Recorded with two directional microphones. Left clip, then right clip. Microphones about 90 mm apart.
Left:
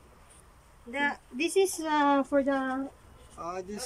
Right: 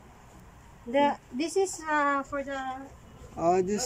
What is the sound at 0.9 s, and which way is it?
Speech, 35° right (ahead or behind).